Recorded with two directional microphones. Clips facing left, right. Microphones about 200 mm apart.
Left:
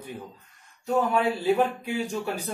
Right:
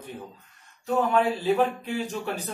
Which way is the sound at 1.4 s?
10° left (ahead or behind).